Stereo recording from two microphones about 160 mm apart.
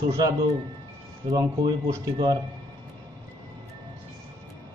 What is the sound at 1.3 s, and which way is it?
Speech, 20° right (ahead or behind).